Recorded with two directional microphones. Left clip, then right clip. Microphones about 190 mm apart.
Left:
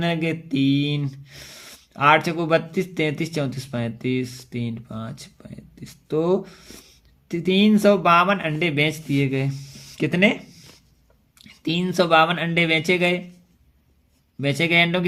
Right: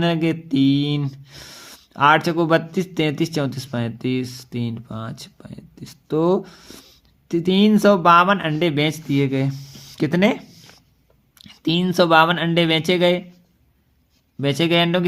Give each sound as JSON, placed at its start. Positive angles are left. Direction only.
{"t": 0.0, "sound": "speech", "side_deg": -25}
{"t": 14.4, "sound": "speech", "side_deg": -25}